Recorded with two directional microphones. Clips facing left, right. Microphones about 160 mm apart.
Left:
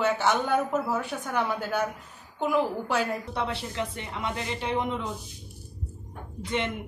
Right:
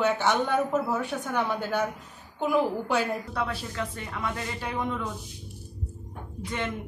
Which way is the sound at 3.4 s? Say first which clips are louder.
Left 1 dB; 20° left (ahead or behind).